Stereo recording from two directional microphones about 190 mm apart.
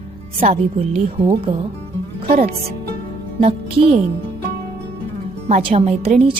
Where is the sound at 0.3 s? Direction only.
30° right (ahead or behind).